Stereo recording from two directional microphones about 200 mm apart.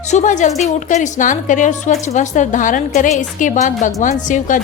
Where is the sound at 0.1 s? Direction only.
40° left (ahead or behind).